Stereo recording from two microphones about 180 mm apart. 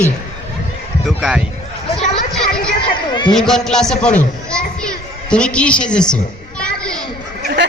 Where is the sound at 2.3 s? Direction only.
5° left (ahead or behind).